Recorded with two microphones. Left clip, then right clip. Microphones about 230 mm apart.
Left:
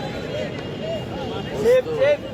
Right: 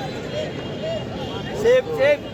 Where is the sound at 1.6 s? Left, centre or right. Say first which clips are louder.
Right 1 dB; right.